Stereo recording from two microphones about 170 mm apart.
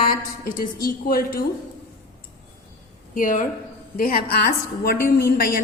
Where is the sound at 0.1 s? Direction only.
55° left (ahead or behind).